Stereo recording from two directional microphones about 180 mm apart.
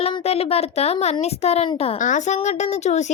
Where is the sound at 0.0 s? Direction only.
35° left (ahead or behind).